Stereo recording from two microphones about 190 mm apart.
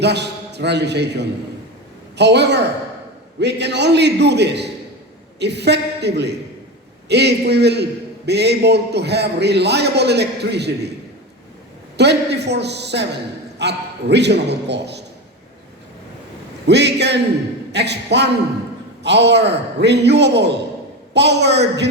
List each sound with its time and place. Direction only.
0.0 s a man's voice: 65° right (ahead or behind)
11.9 s a man's voice: 60° right (ahead or behind)
16.6 s a man's voice: 65° right (ahead or behind)